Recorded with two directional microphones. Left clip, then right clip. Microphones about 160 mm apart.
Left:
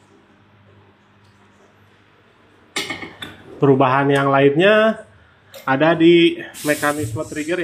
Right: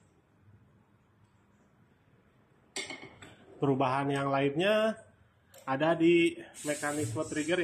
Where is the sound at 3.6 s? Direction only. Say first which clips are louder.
Left 15 dB; 15° right (ahead or behind).